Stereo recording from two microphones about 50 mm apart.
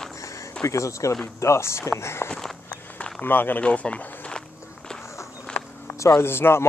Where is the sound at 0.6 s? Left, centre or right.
Left.